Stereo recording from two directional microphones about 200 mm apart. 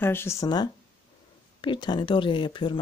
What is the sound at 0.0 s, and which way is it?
Speech, 10° left (ahead or behind).